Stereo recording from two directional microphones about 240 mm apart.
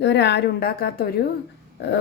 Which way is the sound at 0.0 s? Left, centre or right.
Left.